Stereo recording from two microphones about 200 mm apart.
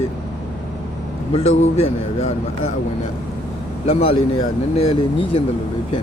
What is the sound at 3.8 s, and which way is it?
Speech, 30° left (ahead or behind).